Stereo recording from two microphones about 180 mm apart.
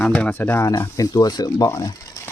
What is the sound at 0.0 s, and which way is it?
Speech, 5° left (ahead or behind).